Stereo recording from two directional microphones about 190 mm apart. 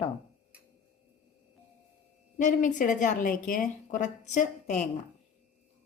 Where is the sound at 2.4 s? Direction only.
40° left (ahead or behind).